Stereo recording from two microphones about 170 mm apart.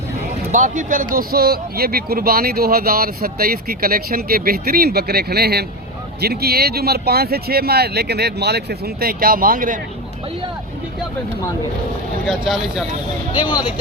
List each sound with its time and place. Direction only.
0.5 s speech: 50° right (ahead or behind)
12.2 s speech: centre (ahead or behind)